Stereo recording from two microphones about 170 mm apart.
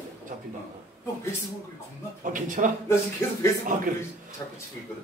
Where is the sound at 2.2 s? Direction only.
50° right (ahead or behind).